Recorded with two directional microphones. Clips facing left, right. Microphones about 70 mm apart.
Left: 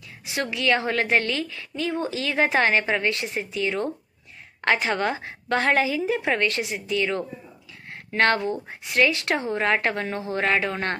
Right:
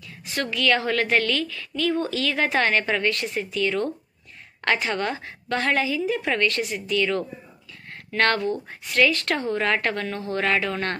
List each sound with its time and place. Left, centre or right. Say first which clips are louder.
0.2 s a woman's voice: right 1 dB; centre